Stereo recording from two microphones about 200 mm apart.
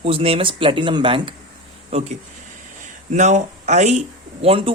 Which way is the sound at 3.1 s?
35° right (ahead or behind).